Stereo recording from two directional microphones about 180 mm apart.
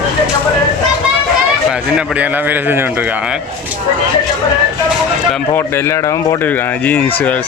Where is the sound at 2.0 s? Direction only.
10° right (ahead or behind).